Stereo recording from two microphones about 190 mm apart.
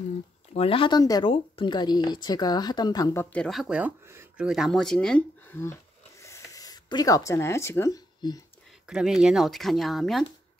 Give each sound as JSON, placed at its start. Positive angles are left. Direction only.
{"t": 0.5, "sound": "speech", "side_deg": 30}
{"t": 3.4, "sound": "speech", "side_deg": 0}
{"t": 6.2, "sound": "a sound", "side_deg": 15}
{"t": 8.8, "sound": "speech", "side_deg": -5}